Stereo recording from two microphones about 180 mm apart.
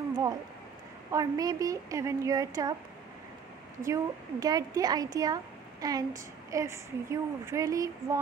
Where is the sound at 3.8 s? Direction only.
20° right (ahead or behind).